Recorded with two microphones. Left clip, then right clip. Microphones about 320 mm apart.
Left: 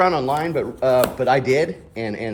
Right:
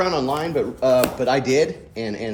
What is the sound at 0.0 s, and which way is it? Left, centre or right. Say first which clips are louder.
Speech: left 3 dB; left.